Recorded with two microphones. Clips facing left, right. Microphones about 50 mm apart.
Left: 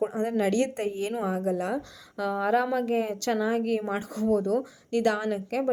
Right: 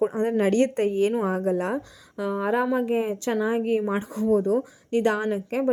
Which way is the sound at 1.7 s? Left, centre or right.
Right.